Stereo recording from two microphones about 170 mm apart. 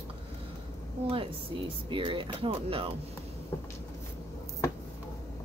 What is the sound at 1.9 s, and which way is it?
Speech, 30° right (ahead or behind).